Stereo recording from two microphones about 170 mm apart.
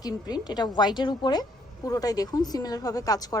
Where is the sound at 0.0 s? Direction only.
25° left (ahead or behind).